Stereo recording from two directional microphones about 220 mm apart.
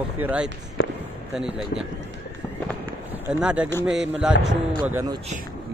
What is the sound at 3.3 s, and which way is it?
Speech, 5° right (ahead or behind).